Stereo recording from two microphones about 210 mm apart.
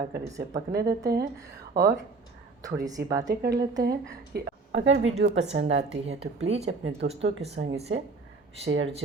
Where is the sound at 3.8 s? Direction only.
50° right (ahead or behind).